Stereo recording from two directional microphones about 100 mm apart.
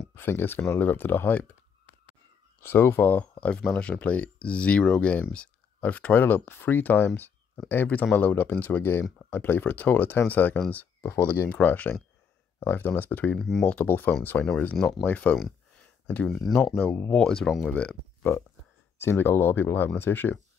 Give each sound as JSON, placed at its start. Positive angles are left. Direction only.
{"t": 0.1, "sound": "speech", "side_deg": 20}
{"t": 2.6, "sound": "speech", "side_deg": 25}
{"t": 13.4, "sound": "speech", "side_deg": 5}
{"t": 13.7, "sound": "speech", "side_deg": 15}
{"t": 14.8, "sound": "speech", "side_deg": 5}
{"t": 15.0, "sound": "speech", "side_deg": 15}
{"t": 15.8, "sound": "a sound", "side_deg": 15}
{"t": 16.3, "sound": "speech", "side_deg": 0}
{"t": 18.3, "sound": "speech", "side_deg": 25}